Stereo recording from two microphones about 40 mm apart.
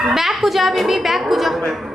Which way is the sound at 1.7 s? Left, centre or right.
Centre.